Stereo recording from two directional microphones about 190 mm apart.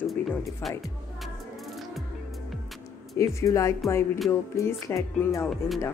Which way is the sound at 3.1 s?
15° left (ahead or behind).